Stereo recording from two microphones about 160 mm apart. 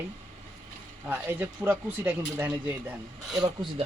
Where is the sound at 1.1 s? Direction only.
15° right (ahead or behind).